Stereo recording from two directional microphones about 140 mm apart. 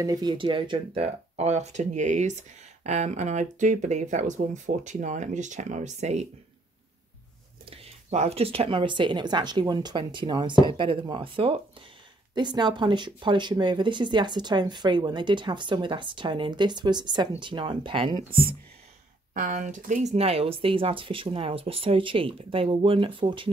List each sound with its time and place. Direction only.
0.0 s speech: 30° right (ahead or behind); by 6.2 s 55° right (ahead or behind)
7.7 s speech: 50° right (ahead or behind)
19.3 s speech: 65° right (ahead or behind); by 23.5 s 35° right (ahead or behind)